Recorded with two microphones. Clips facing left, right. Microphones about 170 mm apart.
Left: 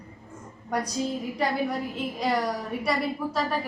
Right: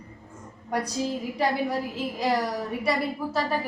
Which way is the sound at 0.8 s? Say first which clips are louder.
Even; 5° right (ahead or behind).